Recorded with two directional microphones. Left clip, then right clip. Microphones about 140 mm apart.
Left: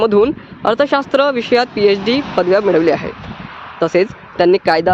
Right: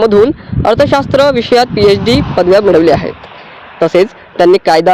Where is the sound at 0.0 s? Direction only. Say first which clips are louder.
Right 5 dB; 25° right (ahead or behind).